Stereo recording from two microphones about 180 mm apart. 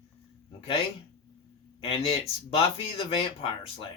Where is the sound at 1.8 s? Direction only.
35° left (ahead or behind).